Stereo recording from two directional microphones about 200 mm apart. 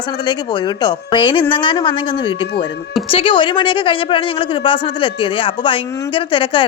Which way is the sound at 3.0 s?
25° left (ahead or behind).